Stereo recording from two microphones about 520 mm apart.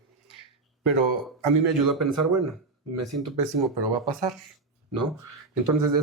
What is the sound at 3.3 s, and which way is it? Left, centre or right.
Speech, right.